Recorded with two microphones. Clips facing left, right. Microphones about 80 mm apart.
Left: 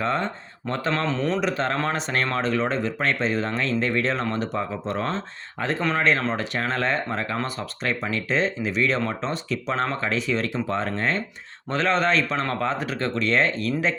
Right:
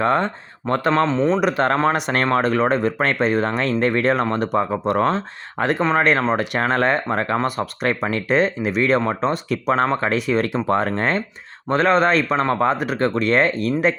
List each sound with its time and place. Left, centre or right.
0.0 s speech: right
0.9 s speech: right
1.4 s speech: right
2.2 s speech: right
6.0 s speech: right
12.7 s speech: right